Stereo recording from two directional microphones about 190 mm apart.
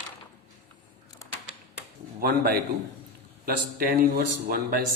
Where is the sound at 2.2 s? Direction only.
55° right (ahead or behind).